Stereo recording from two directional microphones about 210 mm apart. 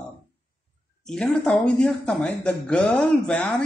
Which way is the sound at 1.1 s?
5° left (ahead or behind).